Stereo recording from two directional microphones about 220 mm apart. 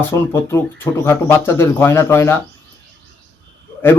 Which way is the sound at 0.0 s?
10° left (ahead or behind).